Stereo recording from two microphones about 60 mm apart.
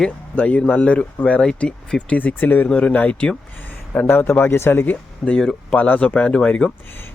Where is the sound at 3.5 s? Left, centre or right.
Left.